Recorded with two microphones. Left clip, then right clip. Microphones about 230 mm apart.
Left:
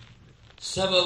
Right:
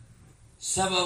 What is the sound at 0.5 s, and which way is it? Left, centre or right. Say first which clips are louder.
Speech: left 3 dB; right.